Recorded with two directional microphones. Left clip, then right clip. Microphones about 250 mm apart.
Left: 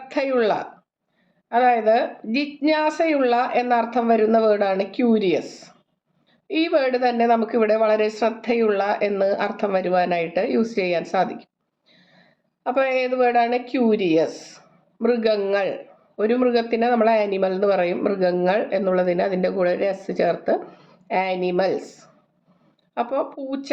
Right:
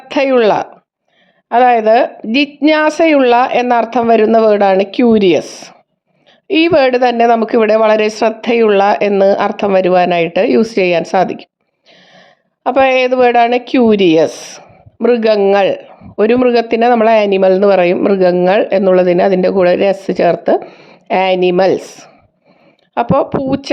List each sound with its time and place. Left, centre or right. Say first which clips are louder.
0.1 s a man's voice: right 10 dB; right